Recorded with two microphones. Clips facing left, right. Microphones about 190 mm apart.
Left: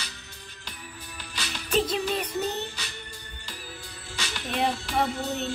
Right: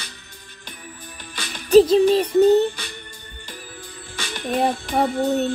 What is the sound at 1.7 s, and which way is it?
Music, 35° right (ahead or behind).